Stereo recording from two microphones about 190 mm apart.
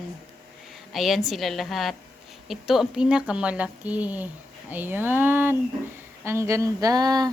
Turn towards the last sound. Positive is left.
turn(degrees=-20)  # may be behind; listen again after turning